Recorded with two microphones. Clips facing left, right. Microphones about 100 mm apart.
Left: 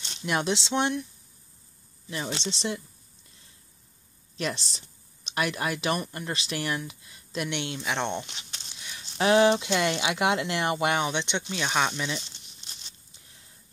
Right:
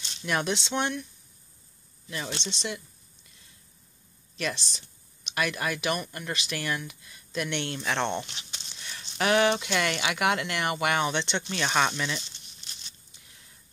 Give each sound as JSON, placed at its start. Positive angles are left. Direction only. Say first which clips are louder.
{"t": 0.2, "sound": "speech", "louder": "left 1 dB", "side_deg": 20}
{"t": 2.0, "sound": "speech", "louder": "left 3 dB", "side_deg": 25}
{"t": 4.4, "sound": "speech", "louder": "left 1 dB", "side_deg": 30}
{"t": 8.3, "sound": "speech", "louder": "even", "side_deg": 0}
{"t": 8.6, "sound": "a sound", "louder": "right 1 dB", "side_deg": 10}
{"t": 9.2, "sound": "speech", "louder": "left 3 dB", "side_deg": 25}